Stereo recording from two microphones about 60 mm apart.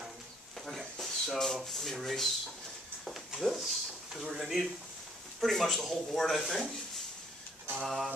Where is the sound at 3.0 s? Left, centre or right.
Centre.